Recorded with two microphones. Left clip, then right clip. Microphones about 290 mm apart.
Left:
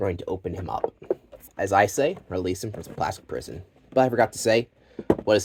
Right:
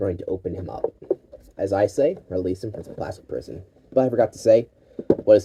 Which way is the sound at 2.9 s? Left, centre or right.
Centre.